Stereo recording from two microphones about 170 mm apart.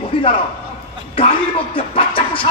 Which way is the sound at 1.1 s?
30° left (ahead or behind).